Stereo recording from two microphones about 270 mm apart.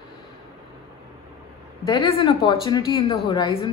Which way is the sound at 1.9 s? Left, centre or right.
Centre.